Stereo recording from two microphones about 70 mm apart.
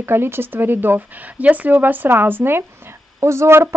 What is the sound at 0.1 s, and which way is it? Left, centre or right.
Speech, right.